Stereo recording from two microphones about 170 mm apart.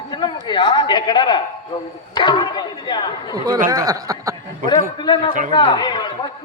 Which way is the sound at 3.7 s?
20° right (ahead or behind).